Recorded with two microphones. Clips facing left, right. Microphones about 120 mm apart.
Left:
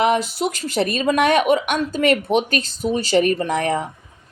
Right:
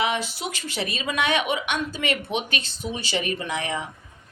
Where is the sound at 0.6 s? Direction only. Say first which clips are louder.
Left 10 dB; 40° left (ahead or behind).